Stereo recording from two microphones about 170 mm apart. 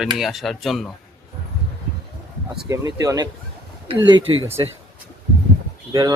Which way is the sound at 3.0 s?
20° right (ahead or behind).